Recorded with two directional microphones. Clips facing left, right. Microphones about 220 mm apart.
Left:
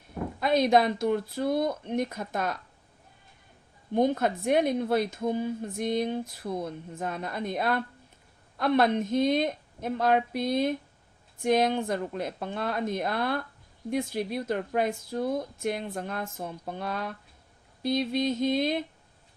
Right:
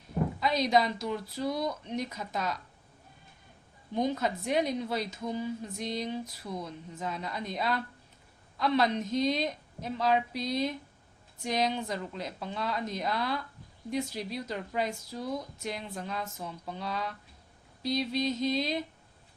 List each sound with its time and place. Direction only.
0.3 s a woman's voice: 55° left (ahead or behind)
3.9 s a woman's voice: 55° left (ahead or behind)